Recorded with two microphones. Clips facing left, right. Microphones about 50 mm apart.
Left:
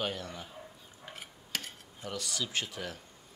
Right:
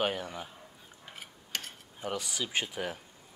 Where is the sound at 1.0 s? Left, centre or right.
Centre.